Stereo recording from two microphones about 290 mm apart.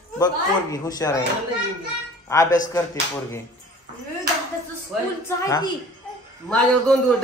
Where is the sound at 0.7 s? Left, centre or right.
Centre.